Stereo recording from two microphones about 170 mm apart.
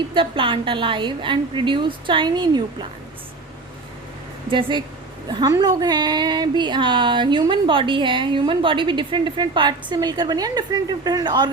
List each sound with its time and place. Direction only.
0.1 s a woman's voice: 30° right (ahead or behind)
5.3 s a woman's voice: 25° right (ahead or behind)